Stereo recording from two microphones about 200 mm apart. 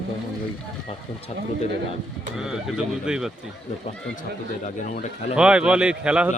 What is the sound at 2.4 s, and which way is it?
Speech, centre (ahead or behind).